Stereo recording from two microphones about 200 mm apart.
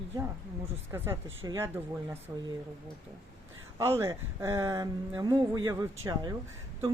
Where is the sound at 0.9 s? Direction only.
15° right (ahead or behind).